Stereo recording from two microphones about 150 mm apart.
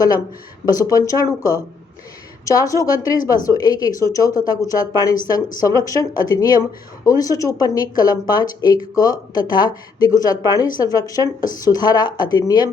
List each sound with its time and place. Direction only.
0.6 s speech: 25° left (ahead or behind)